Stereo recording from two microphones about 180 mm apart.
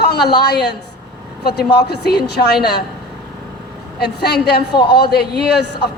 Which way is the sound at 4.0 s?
65° left (ahead or behind).